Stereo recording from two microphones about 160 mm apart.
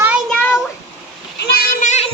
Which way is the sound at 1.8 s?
45° left (ahead or behind).